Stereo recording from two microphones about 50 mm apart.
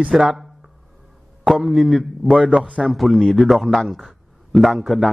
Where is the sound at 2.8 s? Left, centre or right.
Centre.